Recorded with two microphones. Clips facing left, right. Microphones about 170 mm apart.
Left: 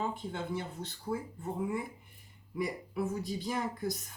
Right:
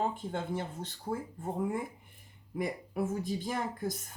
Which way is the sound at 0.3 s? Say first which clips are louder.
Right 2 dB; 45° right (ahead or behind).